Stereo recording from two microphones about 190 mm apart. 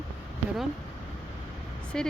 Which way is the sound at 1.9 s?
5° left (ahead or behind).